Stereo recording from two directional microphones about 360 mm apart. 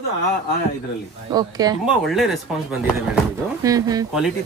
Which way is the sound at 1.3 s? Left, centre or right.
Centre.